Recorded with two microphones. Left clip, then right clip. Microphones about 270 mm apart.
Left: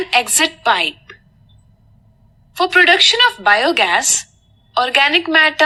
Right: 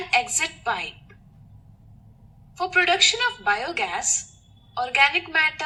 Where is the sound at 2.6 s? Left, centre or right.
Left.